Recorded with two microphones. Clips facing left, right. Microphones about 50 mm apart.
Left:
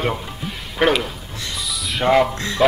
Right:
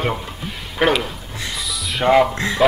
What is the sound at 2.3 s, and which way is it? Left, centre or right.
Speech, centre.